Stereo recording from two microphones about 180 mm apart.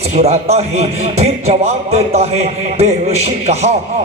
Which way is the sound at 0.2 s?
35° right (ahead or behind).